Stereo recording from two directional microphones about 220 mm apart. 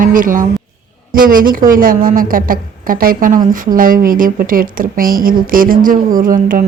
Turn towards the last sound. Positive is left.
turn(degrees=-40)  # may be behind; listen again after turning